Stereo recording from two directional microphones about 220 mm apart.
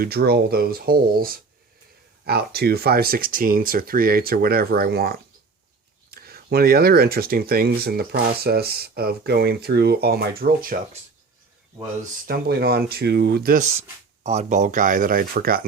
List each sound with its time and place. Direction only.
0.0 s speech: 45° right (ahead or behind)
12.2 s speech: 45° right (ahead or behind)